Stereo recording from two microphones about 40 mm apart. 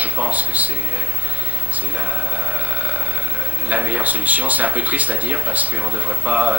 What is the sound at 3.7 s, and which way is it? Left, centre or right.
Speech, right.